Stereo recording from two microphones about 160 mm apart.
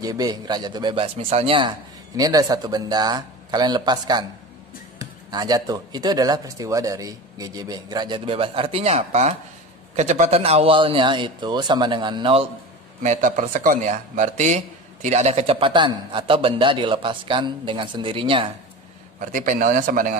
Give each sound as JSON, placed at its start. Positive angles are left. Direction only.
{"t": 0.0, "sound": "speech", "side_deg": -25}
{"t": 2.1, "sound": "speech", "side_deg": -25}
{"t": 13.0, "sound": "speech", "side_deg": -50}
{"t": 19.1, "sound": "a man's voice", "side_deg": -55}